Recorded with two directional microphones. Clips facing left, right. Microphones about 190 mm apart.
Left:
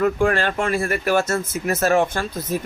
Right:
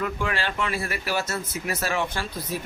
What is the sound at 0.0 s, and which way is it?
Speech, 45° left (ahead or behind).